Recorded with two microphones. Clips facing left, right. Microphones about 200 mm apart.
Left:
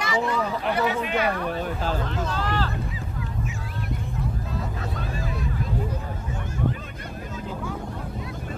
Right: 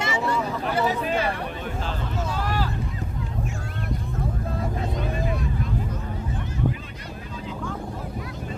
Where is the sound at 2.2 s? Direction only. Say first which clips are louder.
Even; 10° right (ahead or behind).